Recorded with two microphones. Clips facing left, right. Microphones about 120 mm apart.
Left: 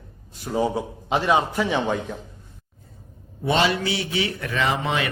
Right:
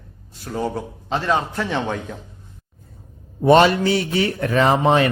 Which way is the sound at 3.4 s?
50° right (ahead or behind).